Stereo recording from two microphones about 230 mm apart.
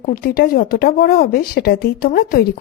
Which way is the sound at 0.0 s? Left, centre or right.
Left.